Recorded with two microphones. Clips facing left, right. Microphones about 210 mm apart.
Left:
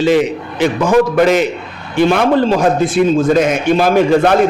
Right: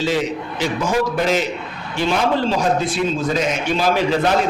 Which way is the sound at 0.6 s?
60° left (ahead or behind).